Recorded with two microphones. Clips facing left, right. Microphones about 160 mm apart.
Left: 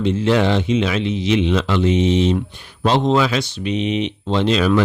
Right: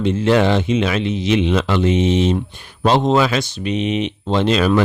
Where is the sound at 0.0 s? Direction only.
50° right (ahead or behind).